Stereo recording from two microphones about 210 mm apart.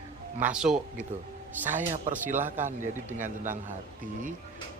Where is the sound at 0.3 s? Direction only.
5° right (ahead or behind).